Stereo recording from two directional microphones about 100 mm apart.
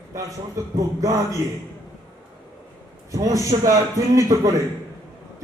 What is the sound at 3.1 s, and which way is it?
A man's voice, 35° right (ahead or behind).